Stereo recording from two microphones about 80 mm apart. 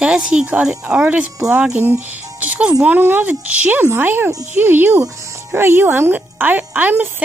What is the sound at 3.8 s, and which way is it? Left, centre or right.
Speech, right.